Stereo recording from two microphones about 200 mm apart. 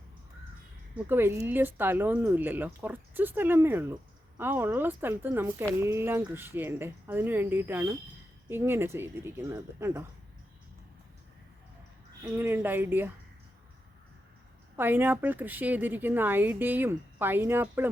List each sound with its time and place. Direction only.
0.9 s a woman's voice: 10° right (ahead or behind)
12.2 s a woman's voice: 10° right (ahead or behind)
14.8 s a woman's voice: 10° right (ahead or behind)